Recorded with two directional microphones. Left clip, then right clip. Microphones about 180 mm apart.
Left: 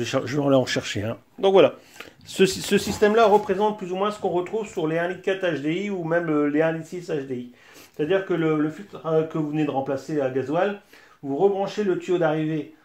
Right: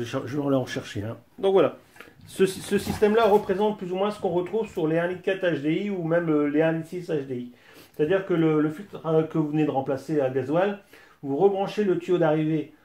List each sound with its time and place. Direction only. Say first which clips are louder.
0.0 s speech: left 5 dB; 45° left (ahead or behind); by 12.5 s 30° left (ahead or behind)